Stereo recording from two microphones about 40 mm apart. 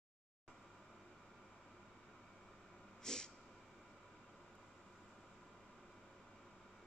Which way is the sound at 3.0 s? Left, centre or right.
Centre.